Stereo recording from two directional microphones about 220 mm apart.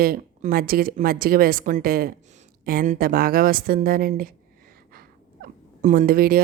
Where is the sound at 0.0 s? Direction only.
40° right (ahead or behind).